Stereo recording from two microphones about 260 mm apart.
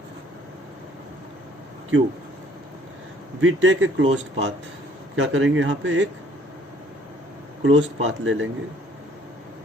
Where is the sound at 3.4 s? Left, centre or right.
Right.